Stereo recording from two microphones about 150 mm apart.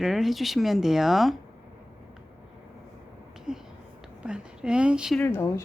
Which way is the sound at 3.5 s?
5° right (ahead or behind).